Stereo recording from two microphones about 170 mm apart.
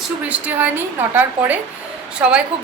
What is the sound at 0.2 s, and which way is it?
A woman's voice, 10° right (ahead or behind).